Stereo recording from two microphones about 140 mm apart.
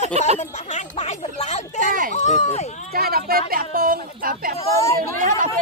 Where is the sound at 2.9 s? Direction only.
90° right.